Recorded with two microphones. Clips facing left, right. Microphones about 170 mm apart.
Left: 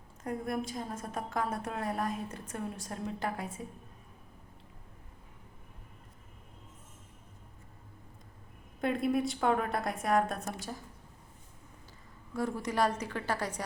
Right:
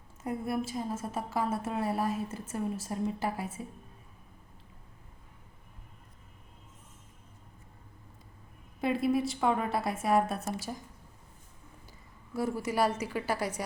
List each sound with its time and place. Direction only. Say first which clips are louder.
0.2 s a woman's voice: right 2 dB; 5° right (ahead or behind)
8.8 s a woman's voice: right 2 dB; 5° right (ahead or behind)
12.3 s a woman's voice: right 2 dB; 10° right (ahead or behind)